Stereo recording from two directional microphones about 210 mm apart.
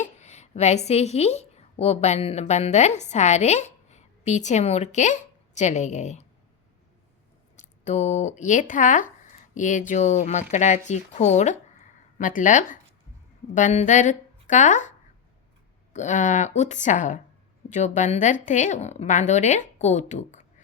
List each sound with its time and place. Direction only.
0.0 s a woman's voice: 30° left (ahead or behind)
7.5 s a woman's voice: 35° left (ahead or behind)